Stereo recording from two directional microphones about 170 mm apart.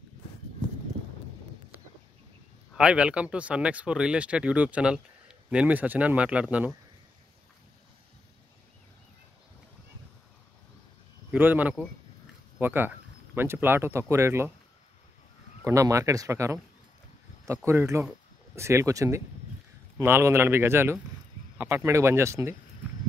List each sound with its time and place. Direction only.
2.7 s speech: 5° right (ahead or behind)
11.3 s speech: 10° right (ahead or behind)
15.6 s speech: 20° right (ahead or behind)
17.6 s speech: 15° right (ahead or behind)